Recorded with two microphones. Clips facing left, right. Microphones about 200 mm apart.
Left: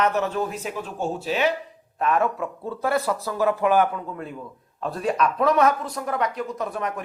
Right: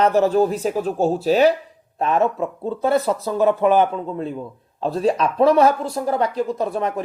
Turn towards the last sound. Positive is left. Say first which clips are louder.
# right 6 dB
turn(degrees=-30)  # may be behind; listen again after turning